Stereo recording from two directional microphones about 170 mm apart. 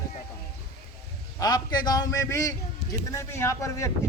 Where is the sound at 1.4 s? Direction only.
25° left (ahead or behind).